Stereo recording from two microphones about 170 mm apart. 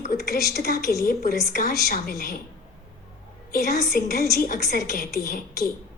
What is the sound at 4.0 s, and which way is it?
A woman's voice, 60° left (ahead or behind).